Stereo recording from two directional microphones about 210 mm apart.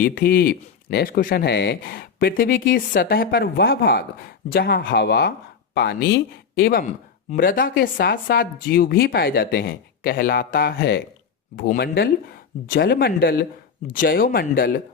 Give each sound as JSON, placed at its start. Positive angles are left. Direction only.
{"t": 0.0, "sound": "speech", "side_deg": 45}